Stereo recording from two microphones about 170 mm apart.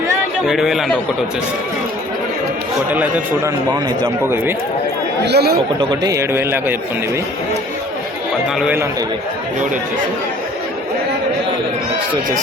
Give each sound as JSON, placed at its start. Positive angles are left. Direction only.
{"t": 0.4, "sound": "a man's voice", "side_deg": 0}
{"t": 2.9, "sound": "a man's voice", "side_deg": -10}
{"t": 5.2, "sound": "speech", "side_deg": -70}
{"t": 5.8, "sound": "a man's voice", "side_deg": -25}
{"t": 8.5, "sound": "a man's voice", "side_deg": -10}